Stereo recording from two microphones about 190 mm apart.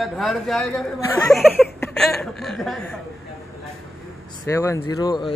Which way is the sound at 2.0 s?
Centre (ahead or behind).